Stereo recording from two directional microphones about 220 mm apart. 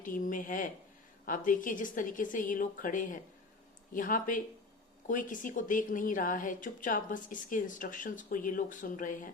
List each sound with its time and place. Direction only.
0.0 s a woman's voice: 35° left (ahead or behind)